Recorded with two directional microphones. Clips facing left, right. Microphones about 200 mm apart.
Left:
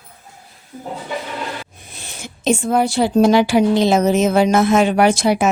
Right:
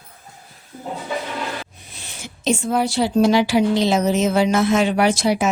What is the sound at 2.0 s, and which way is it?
Speech, 50° left (ahead or behind).